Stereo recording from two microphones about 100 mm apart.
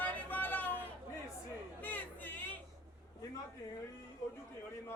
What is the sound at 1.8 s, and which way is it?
Chatter, 15° left (ahead or behind).